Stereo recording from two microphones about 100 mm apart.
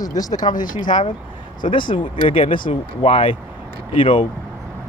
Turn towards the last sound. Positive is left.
turn(degrees=60)  # may be behind; listen again after turning